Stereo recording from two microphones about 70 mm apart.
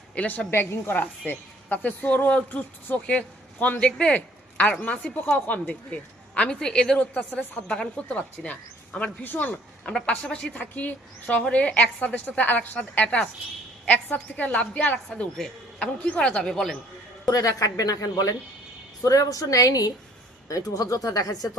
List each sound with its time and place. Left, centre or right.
0.1 s a woman's voice: left
0.5 s a woman's voice: left; by 7.0 s centre
7.0 s a woman's voice: left
7.7 s a woman's voice: centre
16.0 s speech: centre
17.2 s a woman's voice: left